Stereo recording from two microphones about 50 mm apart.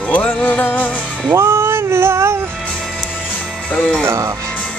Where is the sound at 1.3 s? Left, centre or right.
Right.